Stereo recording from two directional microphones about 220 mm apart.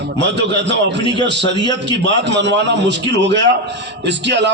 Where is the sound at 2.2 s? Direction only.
50° right (ahead or behind).